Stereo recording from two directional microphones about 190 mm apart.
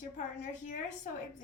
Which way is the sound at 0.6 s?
40° left (ahead or behind).